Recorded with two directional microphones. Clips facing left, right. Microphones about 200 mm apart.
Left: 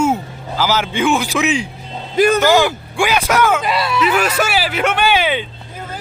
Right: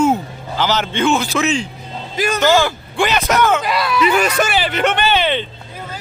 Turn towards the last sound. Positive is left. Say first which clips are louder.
# left 1 dB
turn(degrees=10)  # may be behind; listen again after turning